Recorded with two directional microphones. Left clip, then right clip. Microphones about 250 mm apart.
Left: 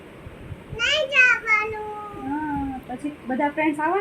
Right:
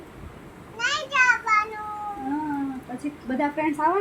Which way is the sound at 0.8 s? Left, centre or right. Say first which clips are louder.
Left 4 dB; centre.